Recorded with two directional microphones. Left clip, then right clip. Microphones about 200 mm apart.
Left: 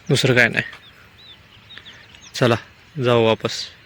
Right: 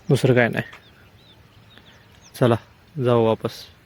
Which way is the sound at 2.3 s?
10° right (ahead or behind).